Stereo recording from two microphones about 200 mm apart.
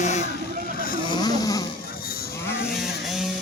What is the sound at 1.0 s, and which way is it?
Vehicle, 20° left (ahead or behind).